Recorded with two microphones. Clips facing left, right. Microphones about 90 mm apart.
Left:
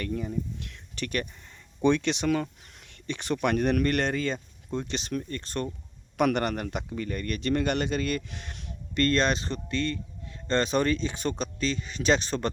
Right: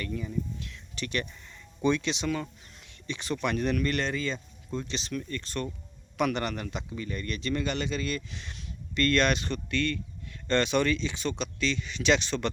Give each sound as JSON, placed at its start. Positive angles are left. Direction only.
{"t": 0.0, "sound": "a man's voice", "side_deg": 45}
{"t": 9.0, "sound": "speech", "side_deg": 30}